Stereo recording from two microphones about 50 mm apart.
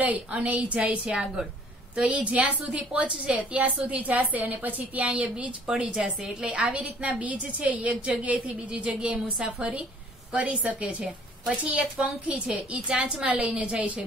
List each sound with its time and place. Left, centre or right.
0.0 s a woman's voice: right
5.7 s speech: centre
6.4 s a woman's voice: right